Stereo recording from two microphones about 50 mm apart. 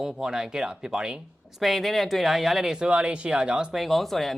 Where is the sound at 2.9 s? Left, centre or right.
Right.